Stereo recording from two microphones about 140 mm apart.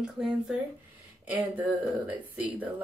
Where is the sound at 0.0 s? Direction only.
5° right (ahead or behind).